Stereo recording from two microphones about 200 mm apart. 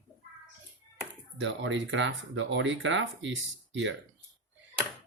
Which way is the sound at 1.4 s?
70° right (ahead or behind).